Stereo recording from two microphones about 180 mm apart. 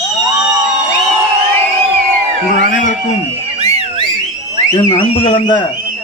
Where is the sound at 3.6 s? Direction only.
35° right (ahead or behind).